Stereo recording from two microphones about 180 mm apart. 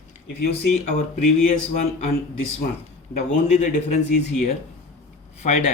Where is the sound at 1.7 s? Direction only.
40° left (ahead or behind).